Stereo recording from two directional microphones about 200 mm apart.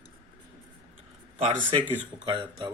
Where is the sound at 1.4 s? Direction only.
25° right (ahead or behind).